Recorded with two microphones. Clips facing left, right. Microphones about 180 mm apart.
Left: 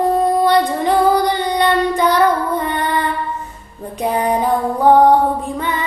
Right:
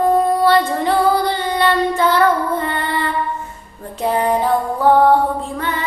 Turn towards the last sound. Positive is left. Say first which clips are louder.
# left 1 dB
turn(degrees=15)  # may be behind; listen again after turning